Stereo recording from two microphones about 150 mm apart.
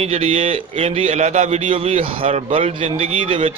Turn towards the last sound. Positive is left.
turn(degrees=-40)  # may be behind; listen again after turning